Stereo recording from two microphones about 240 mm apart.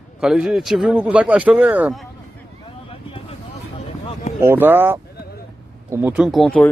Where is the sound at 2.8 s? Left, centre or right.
Left.